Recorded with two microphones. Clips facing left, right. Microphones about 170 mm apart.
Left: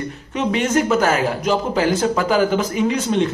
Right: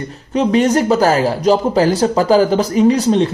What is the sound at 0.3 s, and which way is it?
Speech, 35° right (ahead or behind).